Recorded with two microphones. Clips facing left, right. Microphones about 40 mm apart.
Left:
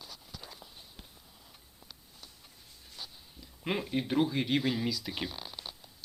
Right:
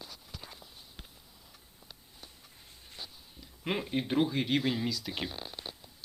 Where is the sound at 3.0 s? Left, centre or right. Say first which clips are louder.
Left 1 dB; centre.